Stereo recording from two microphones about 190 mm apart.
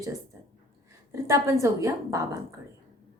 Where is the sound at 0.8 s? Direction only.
15° right (ahead or behind).